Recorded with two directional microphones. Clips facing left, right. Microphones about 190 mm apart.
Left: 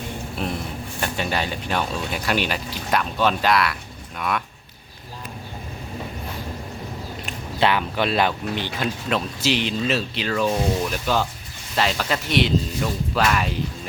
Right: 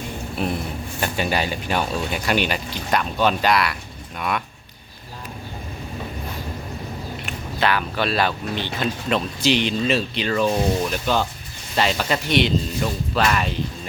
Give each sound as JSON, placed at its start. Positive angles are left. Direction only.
{"t": 0.3, "sound": "a sound", "side_deg": -5}
{"t": 1.0, "sound": "speech", "side_deg": -5}
{"t": 7.3, "sound": "speech", "side_deg": 25}